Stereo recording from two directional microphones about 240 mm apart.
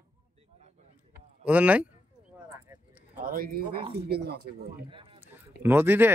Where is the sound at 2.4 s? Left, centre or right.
Centre.